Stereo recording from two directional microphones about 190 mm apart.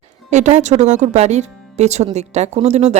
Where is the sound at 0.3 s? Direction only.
40° right (ahead or behind).